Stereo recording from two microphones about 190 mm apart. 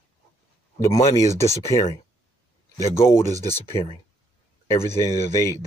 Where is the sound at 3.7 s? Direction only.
30° left (ahead or behind).